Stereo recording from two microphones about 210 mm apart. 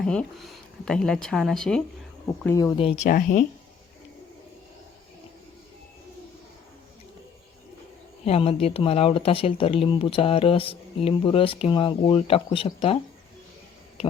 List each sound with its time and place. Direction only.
0.0 s speech: 5° left (ahead or behind)
2.7 s speech: 30° left (ahead or behind)
8.2 s speech: 30° left (ahead or behind)
14.0 s speech: 25° left (ahead or behind)